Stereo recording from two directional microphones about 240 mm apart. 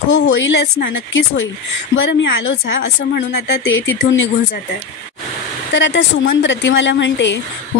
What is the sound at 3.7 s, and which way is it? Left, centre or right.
Speech, left.